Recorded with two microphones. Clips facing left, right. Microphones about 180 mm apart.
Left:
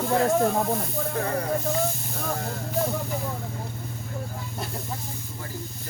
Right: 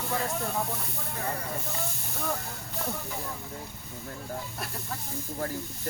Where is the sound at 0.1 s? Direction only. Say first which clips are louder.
Left 10 dB; 50° left (ahead or behind).